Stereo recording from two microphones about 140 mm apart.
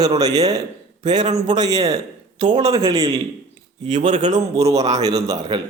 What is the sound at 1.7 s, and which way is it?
Speech, 50° right (ahead or behind).